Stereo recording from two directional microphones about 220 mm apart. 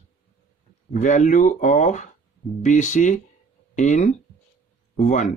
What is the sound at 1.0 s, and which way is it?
Speech, 35° left (ahead or behind).